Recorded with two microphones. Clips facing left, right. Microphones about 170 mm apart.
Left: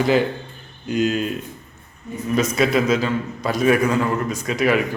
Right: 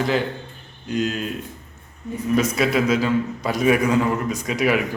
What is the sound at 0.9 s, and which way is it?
Speech, 5° left (ahead or behind).